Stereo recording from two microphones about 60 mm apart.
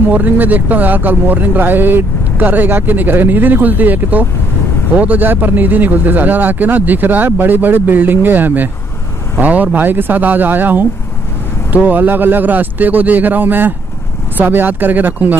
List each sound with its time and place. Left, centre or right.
0.1 s speech: right